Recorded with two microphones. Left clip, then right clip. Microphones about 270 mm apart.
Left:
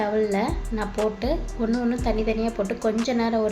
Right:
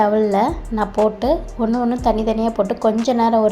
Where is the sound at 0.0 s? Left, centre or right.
Right.